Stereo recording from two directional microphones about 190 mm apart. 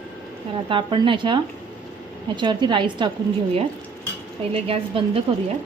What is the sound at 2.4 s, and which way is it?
Speech, 25° right (ahead or behind).